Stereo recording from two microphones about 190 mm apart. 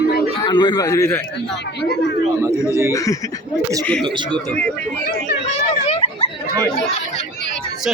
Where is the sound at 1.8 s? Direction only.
65° left (ahead or behind).